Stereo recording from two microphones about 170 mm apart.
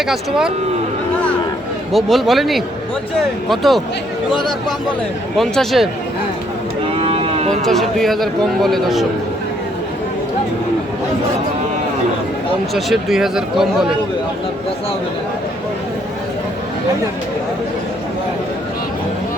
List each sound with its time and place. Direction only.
0.0 s speech: 5° right (ahead or behind)
1.9 s speech: centre (ahead or behind)
5.4 s speech: centre (ahead or behind)
7.0 s cattle: 35° right (ahead or behind)
7.6 s speech: centre (ahead or behind)
12.7 s speech: centre (ahead or behind)